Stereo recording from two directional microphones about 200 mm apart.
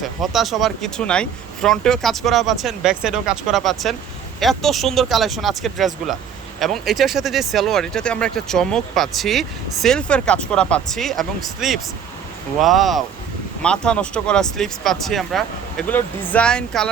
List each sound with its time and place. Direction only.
0.0 s speech: centre (ahead or behind)